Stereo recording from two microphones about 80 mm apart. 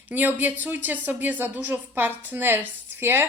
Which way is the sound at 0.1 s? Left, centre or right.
Right.